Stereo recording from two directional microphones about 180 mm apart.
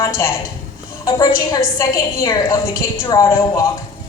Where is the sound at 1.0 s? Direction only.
20° left (ahead or behind).